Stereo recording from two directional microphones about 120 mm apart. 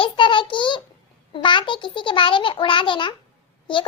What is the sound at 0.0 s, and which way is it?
A child's voice, 45° left (ahead or behind).